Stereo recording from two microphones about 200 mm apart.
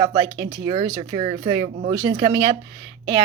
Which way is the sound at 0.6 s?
20° right (ahead or behind).